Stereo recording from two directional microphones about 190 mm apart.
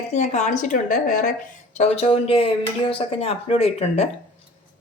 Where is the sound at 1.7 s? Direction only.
35° left (ahead or behind).